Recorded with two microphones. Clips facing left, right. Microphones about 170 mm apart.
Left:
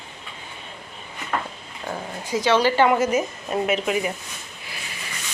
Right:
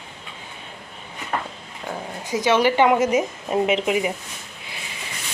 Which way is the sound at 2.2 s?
20° right (ahead or behind).